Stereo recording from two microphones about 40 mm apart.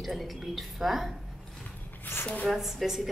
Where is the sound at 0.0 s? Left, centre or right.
Centre.